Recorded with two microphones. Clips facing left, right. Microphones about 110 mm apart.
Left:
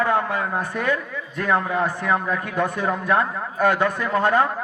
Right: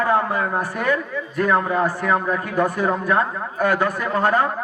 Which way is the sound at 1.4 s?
35° right (ahead or behind).